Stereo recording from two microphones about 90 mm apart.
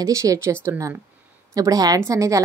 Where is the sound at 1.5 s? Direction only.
40° right (ahead or behind).